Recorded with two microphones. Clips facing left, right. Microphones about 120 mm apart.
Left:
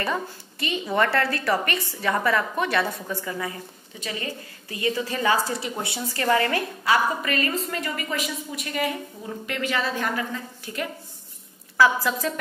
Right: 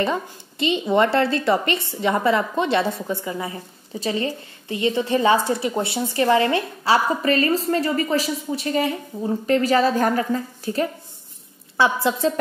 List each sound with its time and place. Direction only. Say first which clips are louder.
0.0 s a woman's voice: right 4 dB; 25° right (ahead or behind)